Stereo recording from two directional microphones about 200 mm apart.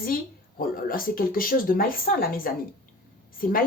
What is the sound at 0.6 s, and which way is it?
Speech, 45° left (ahead or behind).